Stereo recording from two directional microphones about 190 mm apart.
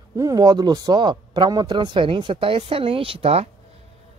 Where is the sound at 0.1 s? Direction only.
15° right (ahead or behind).